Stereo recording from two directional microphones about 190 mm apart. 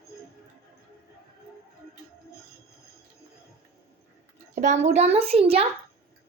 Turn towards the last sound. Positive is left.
turn(degrees=-30)  # may be behind; listen again after turning